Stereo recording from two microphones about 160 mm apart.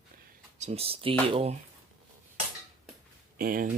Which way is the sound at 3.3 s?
65° right (ahead or behind).